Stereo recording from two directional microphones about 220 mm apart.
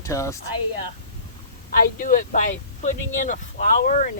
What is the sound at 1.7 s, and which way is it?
Speech, 40° left (ahead or behind).